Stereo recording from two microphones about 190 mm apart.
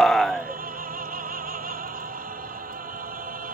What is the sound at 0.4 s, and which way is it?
Opera, 50° right (ahead or behind).